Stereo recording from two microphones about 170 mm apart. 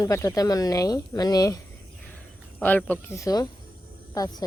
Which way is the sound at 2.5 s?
10° left (ahead or behind).